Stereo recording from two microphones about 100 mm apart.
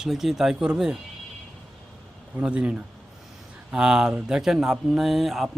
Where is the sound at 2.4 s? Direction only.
10° right (ahead or behind).